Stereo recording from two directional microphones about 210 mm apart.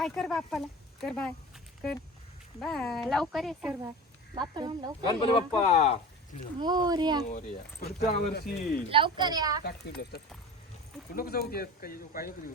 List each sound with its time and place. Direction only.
0.0 s speech: centre (ahead or behind)
2.6 s speech: 5° left (ahead or behind)
4.4 s a child's voice: 20° right (ahead or behind)
5.0 s speech: 25° left (ahead or behind)
6.6 s a child's voice: 20° right (ahead or behind)
7.3 s speech: 50° left (ahead or behind)
8.9 s a child's voice: 25° right (ahead or behind)
9.6 s speech: 50° left (ahead or behind)